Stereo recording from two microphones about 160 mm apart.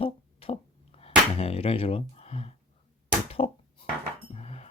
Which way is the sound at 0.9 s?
40° left (ahead or behind).